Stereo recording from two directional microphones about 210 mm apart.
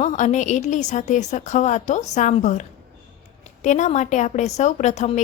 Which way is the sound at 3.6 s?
35° left (ahead or behind).